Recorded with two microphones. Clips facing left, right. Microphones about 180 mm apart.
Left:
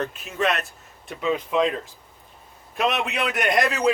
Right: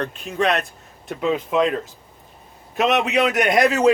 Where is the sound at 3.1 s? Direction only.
40° right (ahead or behind).